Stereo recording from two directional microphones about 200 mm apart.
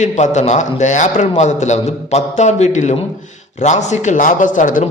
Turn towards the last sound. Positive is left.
turn(degrees=40)  # may be behind; listen again after turning